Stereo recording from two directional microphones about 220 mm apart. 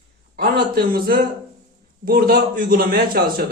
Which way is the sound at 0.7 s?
45° right (ahead or behind).